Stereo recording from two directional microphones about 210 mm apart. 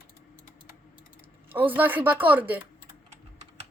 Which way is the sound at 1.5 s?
10° right (ahead or behind).